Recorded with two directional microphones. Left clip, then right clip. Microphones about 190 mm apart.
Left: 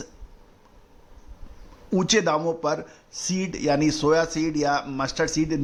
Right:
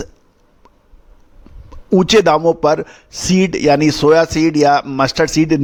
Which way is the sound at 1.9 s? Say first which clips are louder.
Right 11 dB; 50° right (ahead or behind).